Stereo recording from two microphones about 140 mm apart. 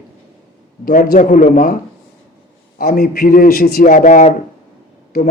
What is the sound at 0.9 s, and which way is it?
Speech, 65° left (ahead or behind).